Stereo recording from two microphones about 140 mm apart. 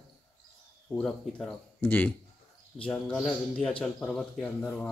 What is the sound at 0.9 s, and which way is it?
A man's voice, 5° left (ahead or behind).